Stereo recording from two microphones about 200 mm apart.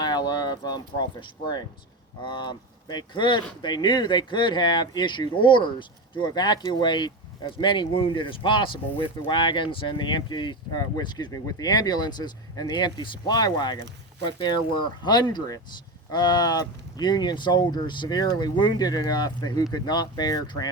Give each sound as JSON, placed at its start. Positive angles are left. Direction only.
{"t": 0.0, "sound": "speech", "side_deg": 20}